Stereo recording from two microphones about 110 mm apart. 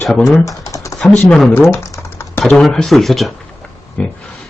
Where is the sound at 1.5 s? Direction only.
20° left (ahead or behind).